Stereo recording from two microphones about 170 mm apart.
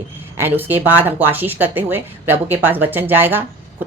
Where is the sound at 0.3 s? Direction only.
10° right (ahead or behind).